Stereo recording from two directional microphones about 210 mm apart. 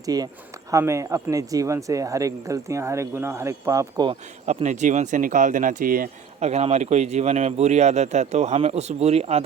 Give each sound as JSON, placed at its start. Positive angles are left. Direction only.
{"t": 0.0, "sound": "speech", "side_deg": -20}
{"t": 4.4, "sound": "speech", "side_deg": -35}